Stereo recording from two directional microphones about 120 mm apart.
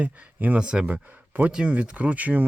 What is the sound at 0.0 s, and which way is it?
Speech, 10° right (ahead or behind).